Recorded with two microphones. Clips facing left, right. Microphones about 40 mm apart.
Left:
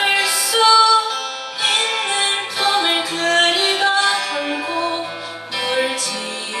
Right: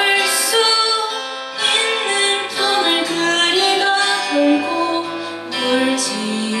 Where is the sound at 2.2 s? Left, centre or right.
Centre.